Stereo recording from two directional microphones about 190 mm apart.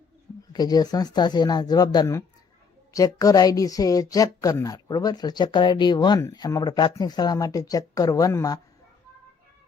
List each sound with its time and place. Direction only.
0.5 s a woman's voice: 20° left (ahead or behind)